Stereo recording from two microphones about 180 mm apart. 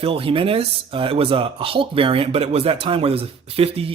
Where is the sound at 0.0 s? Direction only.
30° right (ahead or behind).